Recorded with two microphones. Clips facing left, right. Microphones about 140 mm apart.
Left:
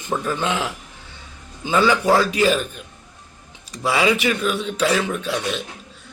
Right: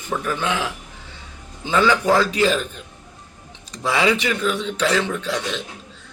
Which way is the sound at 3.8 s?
10° left (ahead or behind).